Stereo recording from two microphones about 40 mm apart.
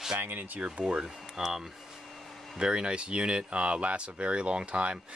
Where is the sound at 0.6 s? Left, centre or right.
Right.